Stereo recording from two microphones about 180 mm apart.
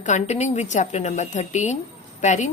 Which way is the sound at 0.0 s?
40° left (ahead or behind).